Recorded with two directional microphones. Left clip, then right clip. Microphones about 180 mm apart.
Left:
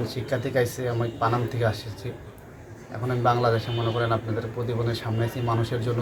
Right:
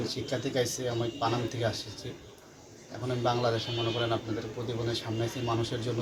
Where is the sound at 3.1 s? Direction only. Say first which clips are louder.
Left 6 dB; 5° left (ahead or behind).